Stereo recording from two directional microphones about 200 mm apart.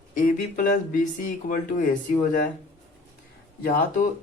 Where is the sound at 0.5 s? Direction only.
45° left (ahead or behind).